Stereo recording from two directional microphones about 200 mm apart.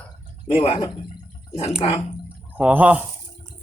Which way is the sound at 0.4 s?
30° left (ahead or behind).